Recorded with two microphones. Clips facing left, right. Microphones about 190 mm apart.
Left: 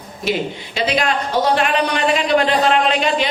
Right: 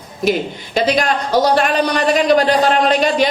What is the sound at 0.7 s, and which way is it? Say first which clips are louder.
A woman's voice: right 3 dB; 40° right (ahead or behind).